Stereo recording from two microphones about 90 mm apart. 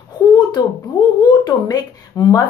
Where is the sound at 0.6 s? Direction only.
45° left (ahead or behind).